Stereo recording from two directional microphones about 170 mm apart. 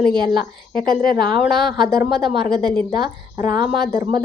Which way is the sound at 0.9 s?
25° right (ahead or behind).